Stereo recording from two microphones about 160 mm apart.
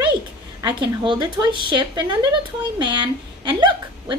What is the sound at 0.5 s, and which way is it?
A woman's voice, 25° right (ahead or behind).